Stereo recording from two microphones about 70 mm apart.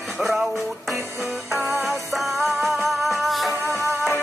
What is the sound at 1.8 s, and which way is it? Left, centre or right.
Music, centre.